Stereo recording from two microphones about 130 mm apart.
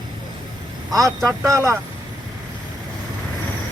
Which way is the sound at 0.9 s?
25° right (ahead or behind).